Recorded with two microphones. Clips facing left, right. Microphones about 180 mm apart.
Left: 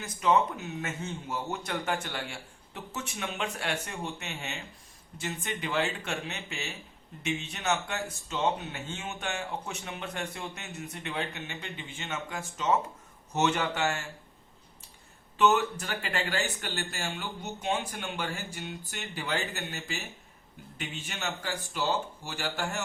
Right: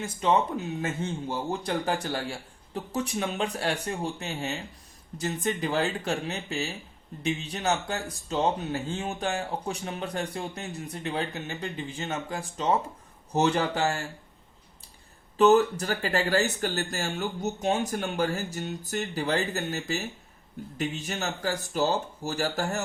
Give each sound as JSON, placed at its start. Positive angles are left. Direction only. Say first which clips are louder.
{"t": 0.0, "sound": "speech", "louder": "right 1 dB", "side_deg": -30}
{"t": 15.4, "sound": "speech", "louder": "right 6 dB", "side_deg": -35}